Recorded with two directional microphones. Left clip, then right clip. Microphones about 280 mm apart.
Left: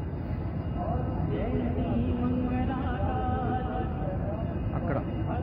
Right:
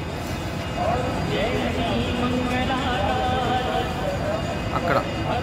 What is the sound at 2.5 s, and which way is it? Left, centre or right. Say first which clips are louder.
Music: right 9 dB; right.